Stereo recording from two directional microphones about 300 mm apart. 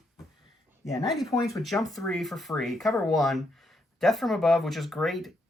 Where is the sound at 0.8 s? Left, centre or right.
Centre.